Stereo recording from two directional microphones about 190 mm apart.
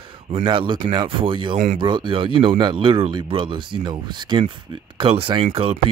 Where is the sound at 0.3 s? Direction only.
25° right (ahead or behind).